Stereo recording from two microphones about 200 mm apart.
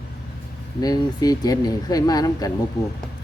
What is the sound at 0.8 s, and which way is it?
Speech, 20° left (ahead or behind).